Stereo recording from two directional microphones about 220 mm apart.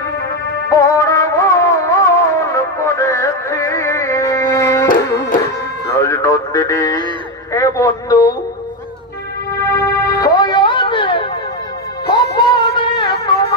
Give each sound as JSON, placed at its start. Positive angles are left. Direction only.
{"t": 0.7, "sound": "music", "side_deg": 15}
{"t": 5.9, "sound": "music", "side_deg": 15}
{"t": 7.5, "sound": "a sound", "side_deg": 15}
{"t": 9.8, "sound": "music", "side_deg": 45}
{"t": 10.0, "sound": "music", "side_deg": 15}